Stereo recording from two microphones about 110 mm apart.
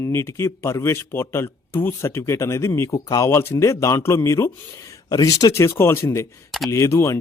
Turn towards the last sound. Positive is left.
turn(degrees=25)  # may be behind; listen again after turning